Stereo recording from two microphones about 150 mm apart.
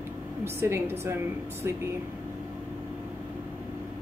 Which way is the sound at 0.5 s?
15° right (ahead or behind).